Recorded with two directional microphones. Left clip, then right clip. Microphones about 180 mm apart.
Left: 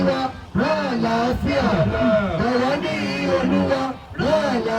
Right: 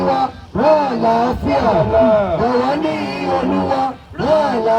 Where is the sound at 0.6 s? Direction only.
45° right (ahead or behind).